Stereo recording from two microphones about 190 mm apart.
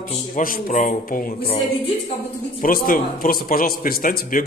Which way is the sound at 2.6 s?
50° left (ahead or behind).